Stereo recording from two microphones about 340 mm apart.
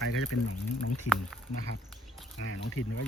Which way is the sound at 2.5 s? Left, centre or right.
Left.